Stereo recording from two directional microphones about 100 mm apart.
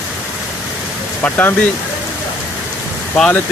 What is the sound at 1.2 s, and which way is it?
Speech, 20° left (ahead or behind).